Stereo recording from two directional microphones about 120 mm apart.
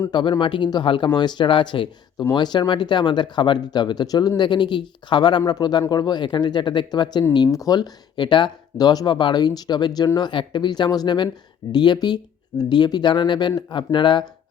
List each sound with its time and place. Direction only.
0.1 s speech: 40° left (ahead or behind)